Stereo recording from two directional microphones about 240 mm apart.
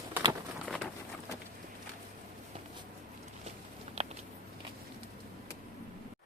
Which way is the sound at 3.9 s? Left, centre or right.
Right.